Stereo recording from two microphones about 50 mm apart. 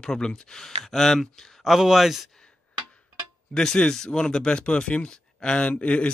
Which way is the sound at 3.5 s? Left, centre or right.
Centre.